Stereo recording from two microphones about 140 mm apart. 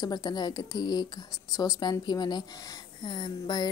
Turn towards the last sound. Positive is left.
turn(degrees=35)  # may be behind; listen again after turning